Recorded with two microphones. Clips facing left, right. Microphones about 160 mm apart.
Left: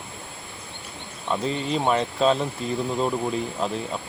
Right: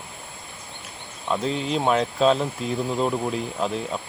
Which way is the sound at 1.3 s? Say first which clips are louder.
Right 1 dB; centre (ahead or behind).